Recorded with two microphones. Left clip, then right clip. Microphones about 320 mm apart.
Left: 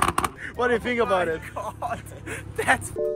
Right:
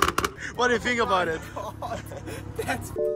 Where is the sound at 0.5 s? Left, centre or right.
Centre.